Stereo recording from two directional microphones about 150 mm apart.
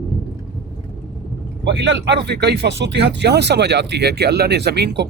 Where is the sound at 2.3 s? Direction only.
90° right.